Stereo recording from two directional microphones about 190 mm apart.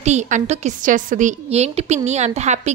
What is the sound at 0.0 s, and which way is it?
A woman's voice, 35° right (ahead or behind).